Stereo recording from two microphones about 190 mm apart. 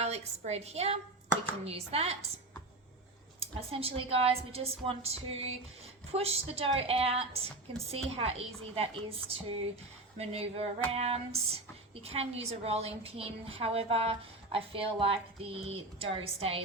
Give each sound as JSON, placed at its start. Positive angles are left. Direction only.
{"t": 0.0, "sound": "a woman's voice", "side_deg": -35}
{"t": 3.4, "sound": "a woman's voice", "side_deg": -30}
{"t": 10.2, "sound": "a woman's voice", "side_deg": -35}